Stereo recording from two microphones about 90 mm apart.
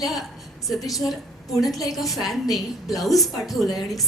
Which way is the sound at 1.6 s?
40° left (ahead or behind).